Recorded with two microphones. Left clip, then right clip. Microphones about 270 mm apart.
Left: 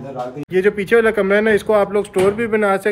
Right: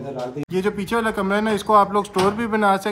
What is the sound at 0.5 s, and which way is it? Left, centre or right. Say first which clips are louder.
Speech: left 9 dB; centre.